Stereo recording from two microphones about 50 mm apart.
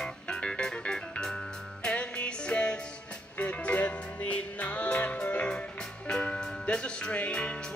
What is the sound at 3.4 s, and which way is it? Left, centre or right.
Music, left.